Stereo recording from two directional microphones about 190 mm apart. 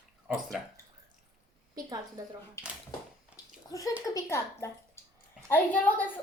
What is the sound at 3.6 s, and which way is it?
A child's voice, 20° left (ahead or behind).